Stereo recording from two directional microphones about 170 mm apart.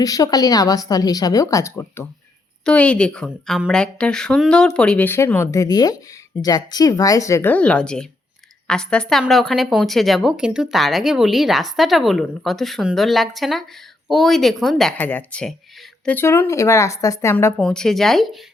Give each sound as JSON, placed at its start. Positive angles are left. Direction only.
{"t": 0.0, "sound": "a woman's voice", "side_deg": 20}
{"t": 17.6, "sound": "a woman's voice", "side_deg": 0}